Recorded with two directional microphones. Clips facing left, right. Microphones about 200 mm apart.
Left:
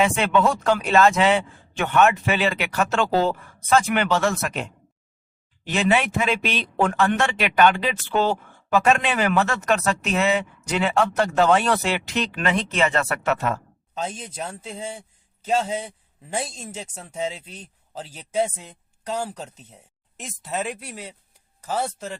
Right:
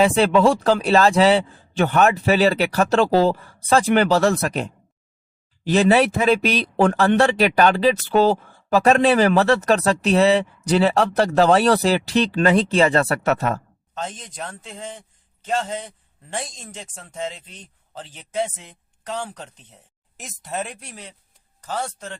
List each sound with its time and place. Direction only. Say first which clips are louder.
0.0 s a man's voice: right 4 dB; 35° right (ahead or behind)
13.9 s a man's voice: left 1 dB; 10° left (ahead or behind)